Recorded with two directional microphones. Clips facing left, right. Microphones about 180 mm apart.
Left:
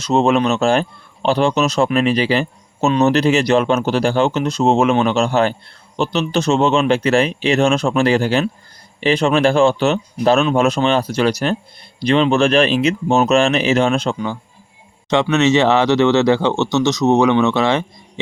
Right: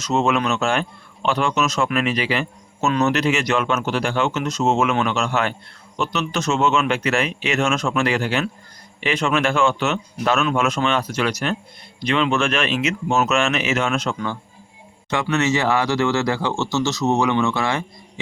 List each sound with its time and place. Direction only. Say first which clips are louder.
0.0 s a man's voice: left 5 dB; 35° left (ahead or behind)